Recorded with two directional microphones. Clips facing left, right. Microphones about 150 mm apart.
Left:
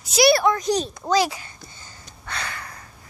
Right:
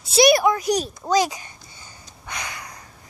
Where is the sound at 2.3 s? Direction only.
15° right (ahead or behind).